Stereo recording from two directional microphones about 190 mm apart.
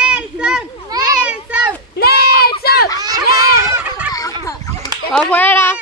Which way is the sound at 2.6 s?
55° left (ahead or behind).